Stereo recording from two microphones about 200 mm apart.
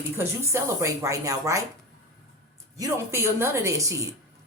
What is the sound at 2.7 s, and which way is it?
Speech, 15° right (ahead or behind).